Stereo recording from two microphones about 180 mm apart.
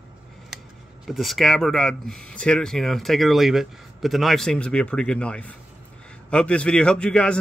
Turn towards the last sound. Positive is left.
turn(degrees=5)  # may be behind; listen again after turning